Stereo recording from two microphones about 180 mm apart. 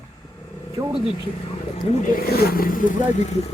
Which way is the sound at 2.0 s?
55° left (ahead or behind).